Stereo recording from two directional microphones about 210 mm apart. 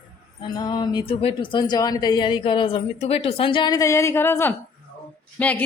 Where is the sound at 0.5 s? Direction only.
20° left (ahead or behind).